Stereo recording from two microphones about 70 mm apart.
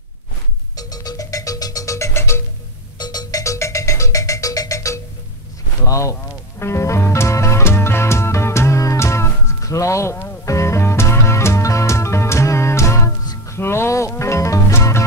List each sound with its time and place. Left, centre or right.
0.7 s music: left
3.0 s music: left
3.5 s music: left
5.9 s speech: left
6.6 s music: left